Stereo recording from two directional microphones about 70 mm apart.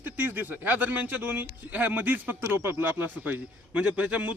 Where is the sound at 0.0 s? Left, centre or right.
Right.